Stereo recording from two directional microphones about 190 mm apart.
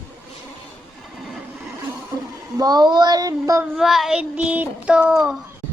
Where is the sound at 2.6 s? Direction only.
20° right (ahead or behind).